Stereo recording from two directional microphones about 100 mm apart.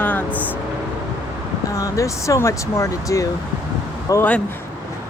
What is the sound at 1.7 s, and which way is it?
Speech, 30° left (ahead or behind).